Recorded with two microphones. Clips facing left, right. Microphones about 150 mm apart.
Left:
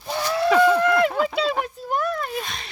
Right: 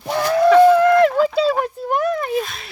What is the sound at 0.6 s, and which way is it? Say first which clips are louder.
Run: right 6 dB; 30° right (ahead or behind).